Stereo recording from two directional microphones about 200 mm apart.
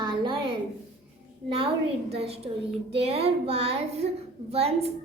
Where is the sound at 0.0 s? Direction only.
20° right (ahead or behind).